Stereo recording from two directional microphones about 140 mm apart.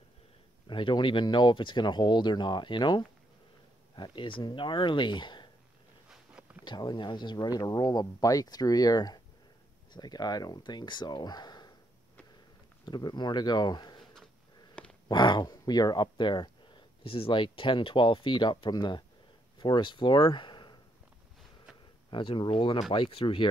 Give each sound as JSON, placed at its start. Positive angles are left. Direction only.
{"t": 0.7, "sound": "speech", "side_deg": 35}
{"t": 6.0, "sound": "a sound", "side_deg": -10}
{"t": 6.6, "sound": "speech", "side_deg": 30}
{"t": 12.8, "sound": "speech", "side_deg": 30}
{"t": 15.0, "sound": "speech", "side_deg": 30}
{"t": 22.1, "sound": "speech", "side_deg": 35}